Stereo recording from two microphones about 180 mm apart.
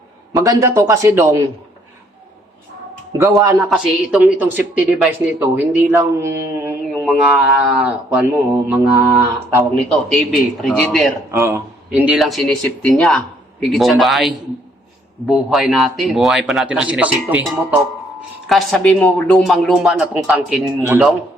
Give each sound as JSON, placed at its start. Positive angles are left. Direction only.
{"t": 0.3, "sound": "speech", "side_deg": -15}
{"t": 3.1, "sound": "speech", "side_deg": -20}
{"t": 3.7, "sound": "speech", "side_deg": 0}
{"t": 10.1, "sound": "speech", "side_deg": 0}
{"t": 11.3, "sound": "speech", "side_deg": -15}